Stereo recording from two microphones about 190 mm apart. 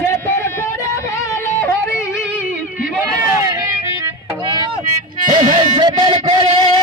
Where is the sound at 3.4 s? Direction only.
20° right (ahead or behind).